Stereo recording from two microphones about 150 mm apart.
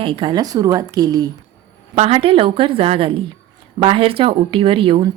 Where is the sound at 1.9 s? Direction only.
40° right (ahead or behind).